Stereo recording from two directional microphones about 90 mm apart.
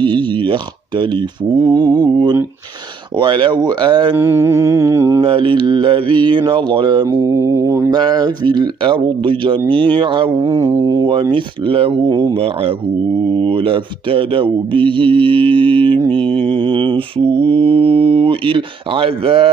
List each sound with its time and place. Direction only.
0.0 s speech: 60° right (ahead or behind)
4.2 s music: 30° right (ahead or behind)
5.2 s speech: 70° right (ahead or behind)
7.1 s music: 30° right (ahead or behind)
7.9 s speech: 55° right (ahead or behind); by 10.3 s 70° right (ahead or behind)
10.4 s mantra: 35° right (ahead or behind)
11.1 s speech: 70° right (ahead or behind)
12.1 s speech: 45° right (ahead or behind)
13.3 s speech: 80° right
16.1 s mantra: 15° left (ahead or behind)
16.4 s speech: 75° right (ahead or behind)